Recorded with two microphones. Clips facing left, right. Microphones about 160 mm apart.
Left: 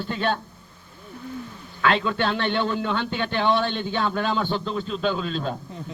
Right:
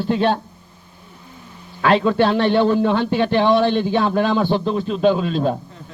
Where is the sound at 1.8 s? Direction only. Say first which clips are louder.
Right 7 dB; 40° right (ahead or behind).